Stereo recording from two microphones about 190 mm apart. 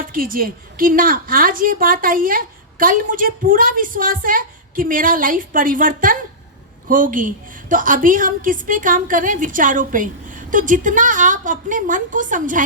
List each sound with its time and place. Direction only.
0.0 s a woman's voice: 45° right (ahead or behind)